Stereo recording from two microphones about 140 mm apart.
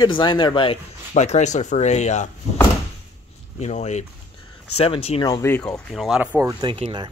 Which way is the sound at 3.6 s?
55° left (ahead or behind).